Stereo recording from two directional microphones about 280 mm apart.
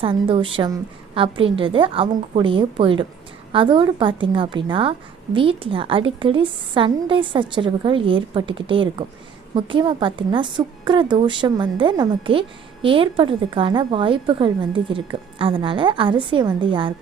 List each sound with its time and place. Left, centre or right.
0.0 s a woman's voice: centre